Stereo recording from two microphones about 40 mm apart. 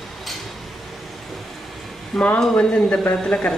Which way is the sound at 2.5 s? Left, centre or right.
Left.